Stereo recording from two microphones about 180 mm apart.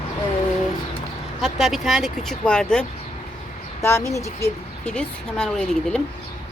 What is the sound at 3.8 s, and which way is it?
Speech, 15° left (ahead or behind).